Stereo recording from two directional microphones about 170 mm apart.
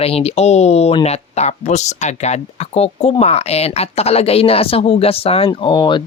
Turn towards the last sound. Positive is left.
turn(degrees=30)  # may be behind; listen again after turning